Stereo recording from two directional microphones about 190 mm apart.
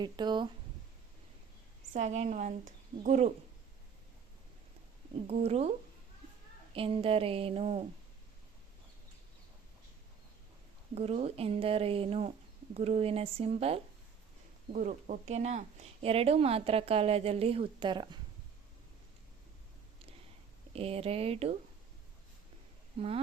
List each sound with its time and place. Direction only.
0.0 s speech: 25° right (ahead or behind)
1.9 s speech: 35° right (ahead or behind)
5.3 s speech: 35° right (ahead or behind)
6.7 s speech: 30° right (ahead or behind)
10.9 s speech: 35° right (ahead or behind)
20.7 s speech: 30° right (ahead or behind)
23.0 s speech: 30° right (ahead or behind)